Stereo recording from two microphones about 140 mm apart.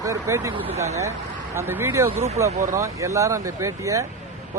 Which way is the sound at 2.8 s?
20° right (ahead or behind).